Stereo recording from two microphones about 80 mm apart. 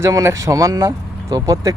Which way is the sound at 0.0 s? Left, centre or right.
Right.